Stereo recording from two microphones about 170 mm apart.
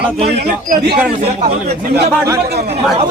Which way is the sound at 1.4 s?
70° right (ahead or behind).